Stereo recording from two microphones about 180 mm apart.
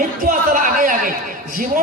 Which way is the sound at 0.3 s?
45° right (ahead or behind).